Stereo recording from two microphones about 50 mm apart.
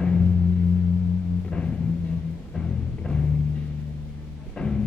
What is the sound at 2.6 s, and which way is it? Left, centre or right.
Music, centre.